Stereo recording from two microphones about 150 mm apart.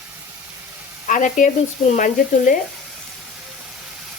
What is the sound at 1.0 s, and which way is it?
Frying, 60° left (ahead or behind).